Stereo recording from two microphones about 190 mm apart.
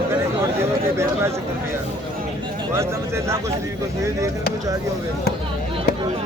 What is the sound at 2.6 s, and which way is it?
Speech, 15° right (ahead or behind).